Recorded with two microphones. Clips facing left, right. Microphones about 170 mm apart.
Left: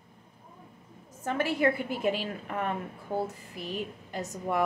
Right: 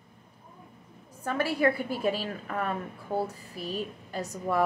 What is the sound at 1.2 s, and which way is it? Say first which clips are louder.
Speech: right 1 dB; 20° left (ahead or behind).